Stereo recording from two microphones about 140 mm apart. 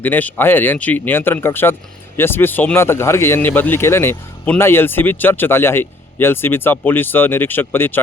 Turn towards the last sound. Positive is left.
turn(degrees=15)  # may be behind; listen again after turning